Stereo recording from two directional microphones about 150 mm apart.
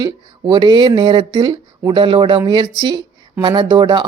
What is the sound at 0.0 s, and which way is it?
Speech, 30° right (ahead or behind).